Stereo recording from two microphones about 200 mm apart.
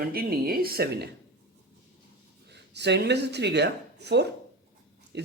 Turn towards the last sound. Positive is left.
turn(degrees=-55)  # may be behind; listen again after turning